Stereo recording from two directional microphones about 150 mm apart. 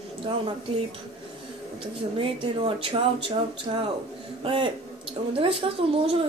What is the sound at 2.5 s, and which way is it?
A woman's voice, 35° right (ahead or behind).